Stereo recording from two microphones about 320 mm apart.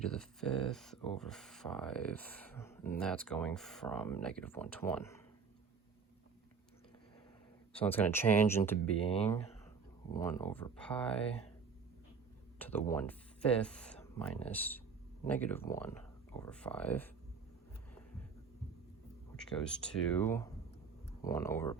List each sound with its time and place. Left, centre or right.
0.0 s speech: centre
7.8 s speech: centre
9.0 s speech: centre
12.5 s speech: centre
19.4 s speech: centre